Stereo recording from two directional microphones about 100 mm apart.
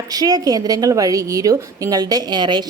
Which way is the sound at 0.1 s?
40° right (ahead or behind).